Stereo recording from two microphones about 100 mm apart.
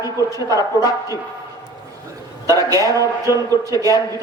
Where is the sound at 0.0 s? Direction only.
35° left (ahead or behind).